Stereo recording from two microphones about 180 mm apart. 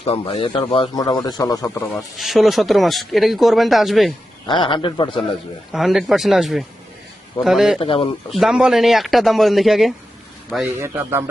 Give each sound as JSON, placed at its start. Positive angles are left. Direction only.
{"t": 0.0, "sound": "a man's voice", "side_deg": 35}
{"t": 2.0, "sound": "speech", "side_deg": 0}
{"t": 4.4, "sound": "a man's voice", "side_deg": 30}
{"t": 5.7, "sound": "speech", "side_deg": 0}
{"t": 7.8, "sound": "speech", "side_deg": 30}
{"t": 8.3, "sound": "speech", "side_deg": 0}
{"t": 10.8, "sound": "speech", "side_deg": -15}